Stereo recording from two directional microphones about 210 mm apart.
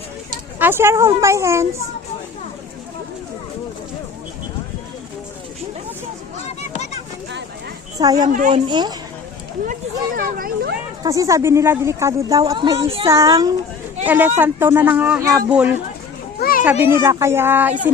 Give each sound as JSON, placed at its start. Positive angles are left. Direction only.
{"t": 0.6, "sound": "a woman's voice", "side_deg": -10}
{"t": 7.9, "sound": "a woman's voice", "side_deg": -20}
{"t": 8.3, "sound": "speech", "side_deg": -40}
{"t": 8.5, "sound": "speech", "side_deg": -20}
{"t": 10.2, "sound": "a child's voice", "side_deg": -45}
{"t": 11.0, "sound": "a woman's voice", "side_deg": -15}
{"t": 16.4, "sound": "children playing", "side_deg": 45}
{"t": 16.8, "sound": "a woman's voice", "side_deg": -15}